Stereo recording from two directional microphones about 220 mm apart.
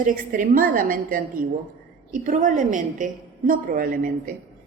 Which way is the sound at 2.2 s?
35° right (ahead or behind).